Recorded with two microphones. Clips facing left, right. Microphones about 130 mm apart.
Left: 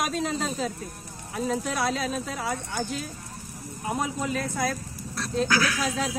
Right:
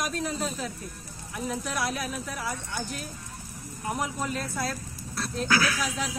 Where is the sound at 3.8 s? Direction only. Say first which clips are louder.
Left 2 dB; 25° left (ahead or behind).